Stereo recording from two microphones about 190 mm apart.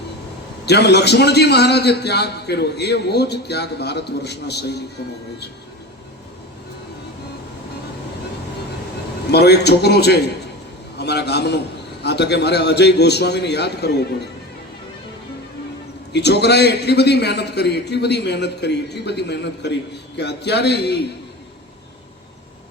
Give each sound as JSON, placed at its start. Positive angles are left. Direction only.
{"t": 0.6, "sound": "a man's voice", "side_deg": 60}
{"t": 9.3, "sound": "a man's voice", "side_deg": 60}
{"t": 16.1, "sound": "a man's voice", "side_deg": 60}